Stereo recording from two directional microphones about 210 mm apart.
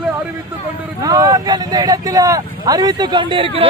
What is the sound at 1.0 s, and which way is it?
Speech, 15° right (ahead or behind).